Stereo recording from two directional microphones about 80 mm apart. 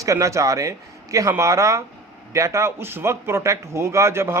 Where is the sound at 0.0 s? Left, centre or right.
Right.